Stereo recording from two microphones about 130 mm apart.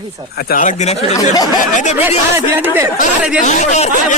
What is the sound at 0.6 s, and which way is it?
Speech, 65° left (ahead or behind).